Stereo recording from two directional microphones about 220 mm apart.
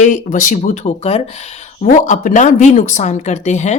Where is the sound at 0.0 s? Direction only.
35° left (ahead or behind).